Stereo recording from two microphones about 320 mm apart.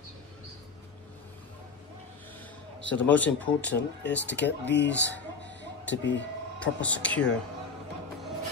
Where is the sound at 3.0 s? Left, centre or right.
Centre.